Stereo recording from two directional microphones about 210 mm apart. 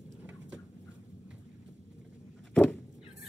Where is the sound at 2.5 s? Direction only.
5° left (ahead or behind).